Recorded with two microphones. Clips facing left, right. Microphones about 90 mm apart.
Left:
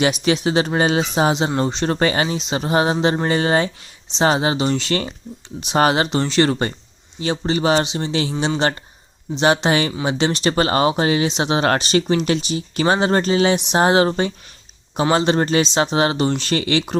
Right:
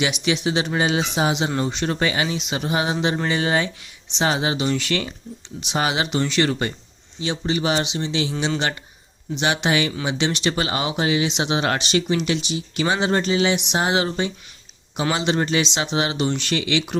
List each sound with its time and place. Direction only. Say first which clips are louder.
0.0 s speech: left 4 dB; 40° left (ahead or behind)
5.5 s speech: left 6 dB; 45° left (ahead or behind)